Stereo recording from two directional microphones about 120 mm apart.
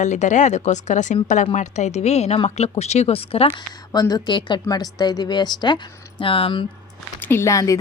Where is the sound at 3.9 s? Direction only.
35° left (ahead or behind).